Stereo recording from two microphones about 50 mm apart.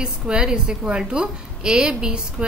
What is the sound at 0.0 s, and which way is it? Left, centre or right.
A woman's voice, centre.